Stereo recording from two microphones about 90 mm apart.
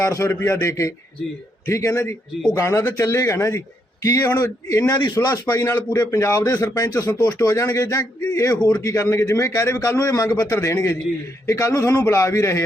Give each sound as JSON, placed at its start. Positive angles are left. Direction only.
{"t": 0.0, "sound": "speech", "side_deg": 30}